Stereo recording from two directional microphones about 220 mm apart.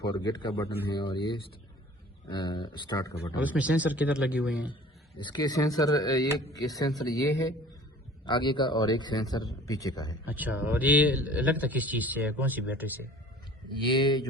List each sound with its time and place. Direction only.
0.0 s speech: 20° left (ahead or behind)
3.3 s a man's voice: 5° right (ahead or behind)
4.7 s speech: 20° left (ahead or behind)
10.2 s a man's voice: 5° right (ahead or behind)
13.8 s speech: 20° left (ahead or behind)